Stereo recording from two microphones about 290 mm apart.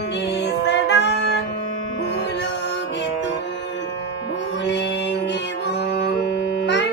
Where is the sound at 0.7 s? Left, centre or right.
Left.